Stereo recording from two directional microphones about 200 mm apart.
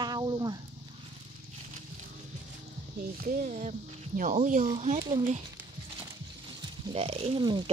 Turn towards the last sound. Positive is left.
turn(degrees=-25)  # may be behind; listen again after turning